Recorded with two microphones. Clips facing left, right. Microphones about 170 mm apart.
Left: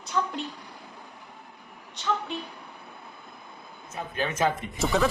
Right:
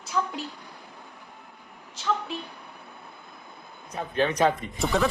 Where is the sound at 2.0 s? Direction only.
Centre (ahead or behind).